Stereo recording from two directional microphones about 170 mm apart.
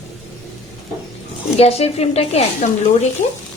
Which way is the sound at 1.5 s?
40° left (ahead or behind).